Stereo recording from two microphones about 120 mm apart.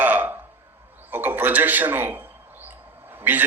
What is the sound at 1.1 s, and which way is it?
A man's voice, 15° right (ahead or behind).